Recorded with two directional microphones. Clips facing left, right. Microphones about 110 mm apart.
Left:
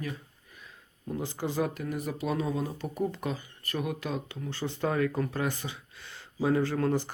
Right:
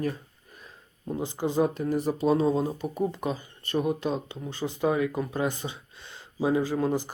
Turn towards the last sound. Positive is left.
turn(degrees=-15)  # may be behind; listen again after turning